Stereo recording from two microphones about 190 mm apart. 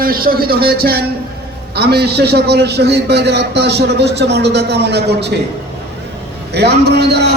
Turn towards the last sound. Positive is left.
turn(degrees=-60)  # may be behind; listen again after turning